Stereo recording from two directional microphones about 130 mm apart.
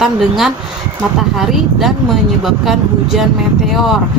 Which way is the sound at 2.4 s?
Centre (ahead or behind).